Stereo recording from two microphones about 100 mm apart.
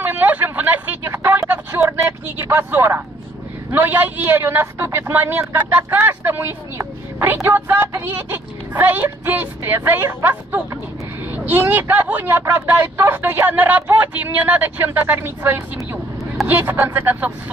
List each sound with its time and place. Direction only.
0.0 s a sound: 20° right (ahead or behind)
1.1 s vehicle: 25° right (ahead or behind)
3.7 s speech: 20° right (ahead or behind)